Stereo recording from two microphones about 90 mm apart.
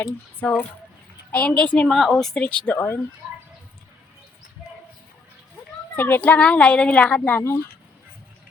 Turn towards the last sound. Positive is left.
turn(degrees=15)  # may be behind; listen again after turning